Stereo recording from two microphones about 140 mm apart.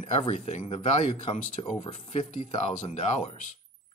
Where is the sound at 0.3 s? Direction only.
50° left (ahead or behind).